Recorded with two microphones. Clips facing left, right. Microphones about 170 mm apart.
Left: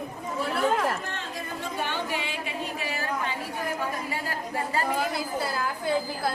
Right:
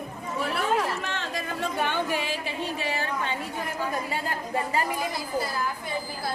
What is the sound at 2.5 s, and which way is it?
Speech, 30° right (ahead or behind).